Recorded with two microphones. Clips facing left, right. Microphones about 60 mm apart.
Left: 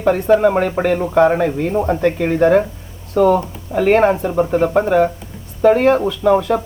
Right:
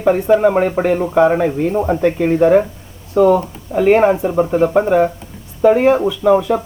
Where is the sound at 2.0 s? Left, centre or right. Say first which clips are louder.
Right 3 dB; centre.